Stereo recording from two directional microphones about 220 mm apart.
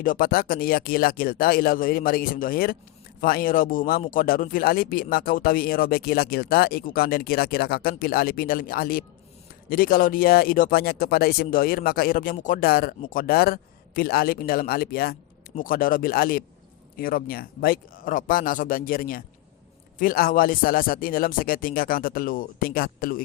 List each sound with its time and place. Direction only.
0.0 s speech: 40° left (ahead or behind)